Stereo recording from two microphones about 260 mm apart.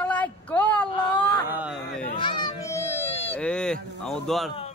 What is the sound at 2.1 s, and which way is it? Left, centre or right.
Speech, centre.